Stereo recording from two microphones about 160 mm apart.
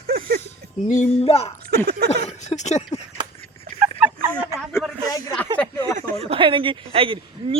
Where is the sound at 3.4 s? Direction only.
35° left (ahead or behind).